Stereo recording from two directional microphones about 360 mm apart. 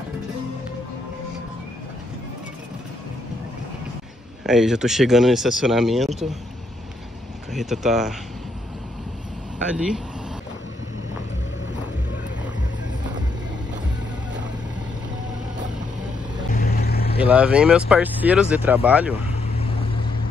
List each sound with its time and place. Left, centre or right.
4.5 s speech: centre
7.5 s speech: centre
9.8 s speech: centre
16.5 s vehicle: left
17.2 s speech: centre
19.5 s vehicle: centre